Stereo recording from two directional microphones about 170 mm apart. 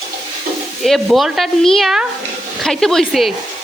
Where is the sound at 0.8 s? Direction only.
Centre (ahead or behind).